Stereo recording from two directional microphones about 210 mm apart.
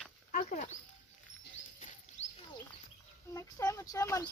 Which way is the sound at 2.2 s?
30° left (ahead or behind).